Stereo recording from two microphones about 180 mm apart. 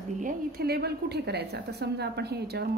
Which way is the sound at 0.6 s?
60° right (ahead or behind).